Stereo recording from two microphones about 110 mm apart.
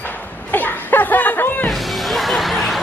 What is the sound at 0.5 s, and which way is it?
Laughter, 15° left (ahead or behind).